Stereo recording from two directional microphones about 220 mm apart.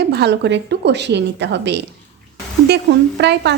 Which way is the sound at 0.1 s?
50° right (ahead or behind).